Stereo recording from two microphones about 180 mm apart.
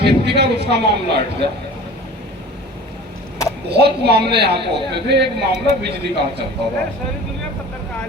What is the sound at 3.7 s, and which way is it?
A man's voice, 65° right (ahead or behind).